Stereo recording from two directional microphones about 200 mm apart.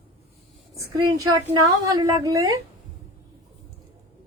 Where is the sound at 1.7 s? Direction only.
20° right (ahead or behind).